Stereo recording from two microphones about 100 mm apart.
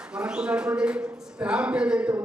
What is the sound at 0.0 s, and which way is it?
Speech, 10° right (ahead or behind).